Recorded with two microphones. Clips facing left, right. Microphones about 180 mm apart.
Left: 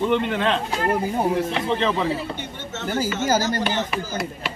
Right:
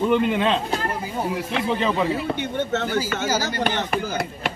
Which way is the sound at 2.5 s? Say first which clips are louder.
Right 9 dB; 55° right (ahead or behind).